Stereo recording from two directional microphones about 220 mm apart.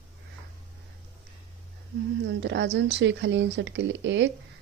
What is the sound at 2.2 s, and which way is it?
Speech, 55° right (ahead or behind).